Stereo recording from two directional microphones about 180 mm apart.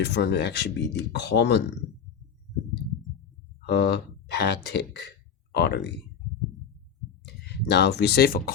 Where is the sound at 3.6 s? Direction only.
65° left (ahead or behind).